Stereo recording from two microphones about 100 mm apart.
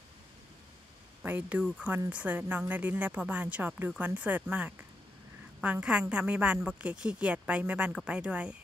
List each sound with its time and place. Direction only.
1.2 s speech: 15° right (ahead or behind)